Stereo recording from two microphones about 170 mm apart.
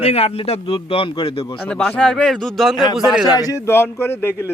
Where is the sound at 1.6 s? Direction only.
5° left (ahead or behind).